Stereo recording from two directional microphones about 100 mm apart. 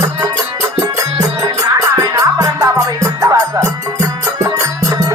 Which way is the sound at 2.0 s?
35° right (ahead or behind).